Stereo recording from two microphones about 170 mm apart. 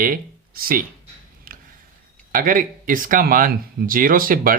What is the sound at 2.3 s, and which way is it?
Speech, 55° right (ahead or behind).